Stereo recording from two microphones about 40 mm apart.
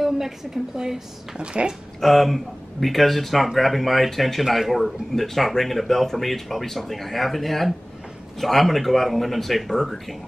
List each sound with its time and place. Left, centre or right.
0.7 s speech: centre
1.4 s speech: right
2.0 s speech: centre